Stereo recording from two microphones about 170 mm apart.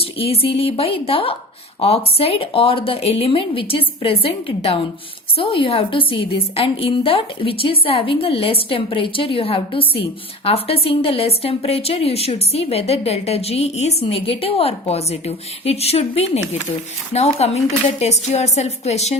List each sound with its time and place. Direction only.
0.0 s a woman's voice: 35° left (ahead or behind)